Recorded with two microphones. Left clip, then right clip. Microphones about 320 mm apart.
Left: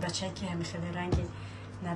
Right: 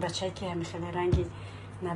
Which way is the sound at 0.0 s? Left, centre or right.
Centre.